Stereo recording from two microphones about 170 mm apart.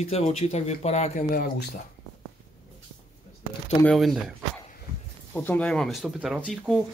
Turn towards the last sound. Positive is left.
turn(degrees=0)  # may be behind; listen again after turning